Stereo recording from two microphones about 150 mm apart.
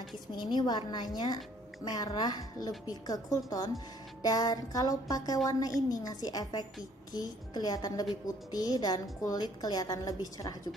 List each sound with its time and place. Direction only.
0.4 s speech: 30° left (ahead or behind)